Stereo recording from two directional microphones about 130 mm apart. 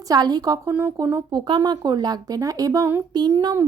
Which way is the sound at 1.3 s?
35° right (ahead or behind).